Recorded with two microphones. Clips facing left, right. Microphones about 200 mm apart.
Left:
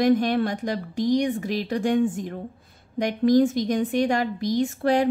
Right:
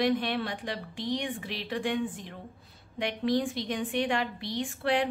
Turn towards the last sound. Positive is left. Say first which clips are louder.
# left 7 dB
turn(degrees=40)  # may be behind; listen again after turning